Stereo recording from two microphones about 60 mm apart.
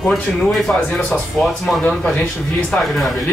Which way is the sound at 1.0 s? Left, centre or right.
Centre.